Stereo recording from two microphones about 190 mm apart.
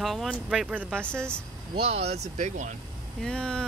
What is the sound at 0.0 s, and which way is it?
Speech, centre (ahead or behind).